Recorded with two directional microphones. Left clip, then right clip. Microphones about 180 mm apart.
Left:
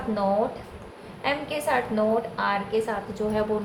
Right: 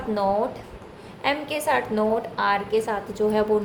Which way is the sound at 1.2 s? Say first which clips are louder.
Right 2 dB; 60° right (ahead or behind).